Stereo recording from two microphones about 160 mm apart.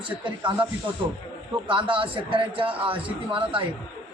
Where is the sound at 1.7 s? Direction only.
30° right (ahead or behind).